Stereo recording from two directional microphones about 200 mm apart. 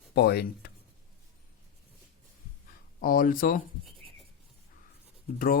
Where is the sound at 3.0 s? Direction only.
45° left (ahead or behind).